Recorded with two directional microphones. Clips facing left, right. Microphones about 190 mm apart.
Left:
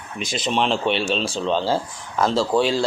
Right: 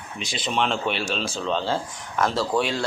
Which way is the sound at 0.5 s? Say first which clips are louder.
Left 3 dB; 30° left (ahead or behind).